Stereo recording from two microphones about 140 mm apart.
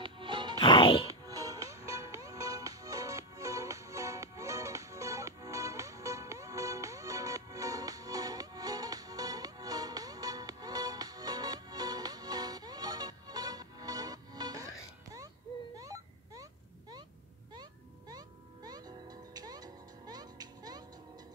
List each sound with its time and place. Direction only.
0.0 s music: 35° right (ahead or behind)
0.6 s music: 35° left (ahead or behind)
1.0 s music: 25° right (ahead or behind)
15.7 s a sound: 25° right (ahead or behind)
18.1 s music: 30° right (ahead or behind)